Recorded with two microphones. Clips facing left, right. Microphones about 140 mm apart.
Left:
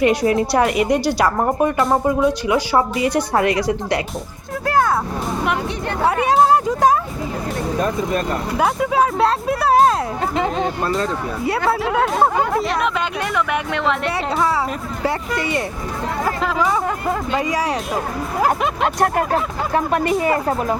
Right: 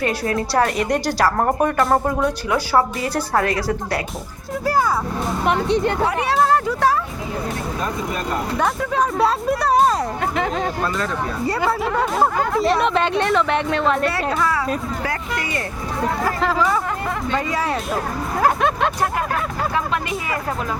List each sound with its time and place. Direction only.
0.0 s a woman's voice: 15° left (ahead or behind)
1.4 s speech: centre (ahead or behind)
2.7 s a woman's voice: 15° left (ahead or behind)
4.6 s speech: 5° right (ahead or behind)
5.5 s speech: 25° right (ahead or behind)
6.2 s a woman's voice: 20° left (ahead or behind)
8.5 s speech: 10° left (ahead or behind)
10.3 s speech: 30° left (ahead or behind)
11.5 s speech: 5° left (ahead or behind)
13.1 s speech: 25° right (ahead or behind)
14.0 s a woman's voice: 25° left (ahead or behind)
16.4 s a woman's voice: 10° left (ahead or behind)
19.7 s speech: 45° left (ahead or behind)
20.3 s a woman's voice: 30° left (ahead or behind)